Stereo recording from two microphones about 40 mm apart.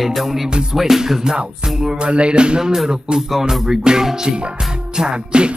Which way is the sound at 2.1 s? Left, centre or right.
Right.